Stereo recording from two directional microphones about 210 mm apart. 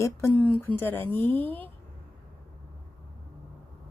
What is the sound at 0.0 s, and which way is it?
Speech, 10° left (ahead or behind).